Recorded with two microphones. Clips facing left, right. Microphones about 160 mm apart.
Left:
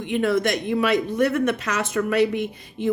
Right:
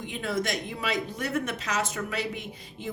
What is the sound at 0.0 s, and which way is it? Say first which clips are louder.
Speech: left 9 dB; 65° left (ahead or behind).